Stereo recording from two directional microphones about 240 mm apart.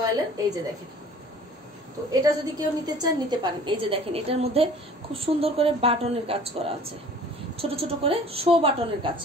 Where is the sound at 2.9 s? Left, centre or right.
Centre.